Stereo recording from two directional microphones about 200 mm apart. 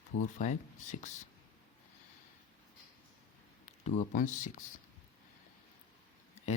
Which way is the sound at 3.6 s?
35° left (ahead or behind).